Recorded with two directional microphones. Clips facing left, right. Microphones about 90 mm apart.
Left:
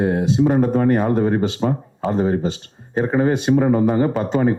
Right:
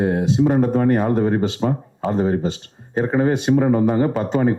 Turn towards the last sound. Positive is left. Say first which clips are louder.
# even
turn(degrees=25)  # may be behind; listen again after turning